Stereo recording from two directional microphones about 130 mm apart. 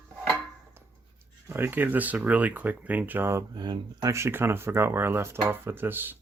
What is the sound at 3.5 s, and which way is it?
Speech, 30° right (ahead or behind).